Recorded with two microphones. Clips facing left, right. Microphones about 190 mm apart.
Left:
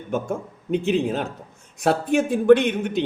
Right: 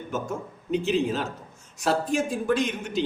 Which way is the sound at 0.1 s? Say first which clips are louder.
Left 6 dB; 55° left (ahead or behind).